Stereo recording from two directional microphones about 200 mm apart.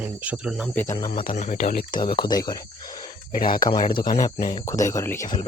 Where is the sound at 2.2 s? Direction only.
20° left (ahead or behind).